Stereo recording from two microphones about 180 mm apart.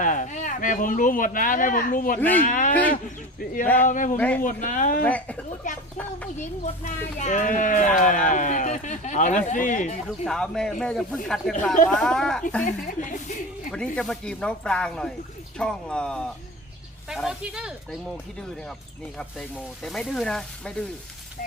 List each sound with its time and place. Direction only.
0.0 s speech: 45° left (ahead or behind)
2.1 s speech: 10° left (ahead or behind)
2.4 s speech: 45° left (ahead or behind)
3.8 s speech: 45° left (ahead or behind)
5.0 s speech: 10° left (ahead or behind)
5.7 s speech: 40° left (ahead or behind)
10.1 s speech: 5° left (ahead or behind)
12.6 s speech: 50° left (ahead or behind)
13.7 s speech: 5° left (ahead or behind)
19.4 s speech: centre (ahead or behind)